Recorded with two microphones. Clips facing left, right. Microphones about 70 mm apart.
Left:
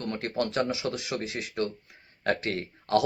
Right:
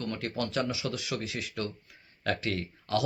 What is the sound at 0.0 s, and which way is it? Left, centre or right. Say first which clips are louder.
Speech: left 3 dB; left.